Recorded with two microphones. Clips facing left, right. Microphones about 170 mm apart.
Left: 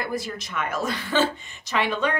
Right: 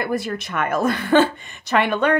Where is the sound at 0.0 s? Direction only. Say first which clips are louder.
Right 6 dB; 60° right (ahead or behind).